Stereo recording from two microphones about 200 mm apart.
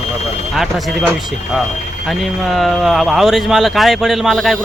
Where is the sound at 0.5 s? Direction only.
Centre (ahead or behind).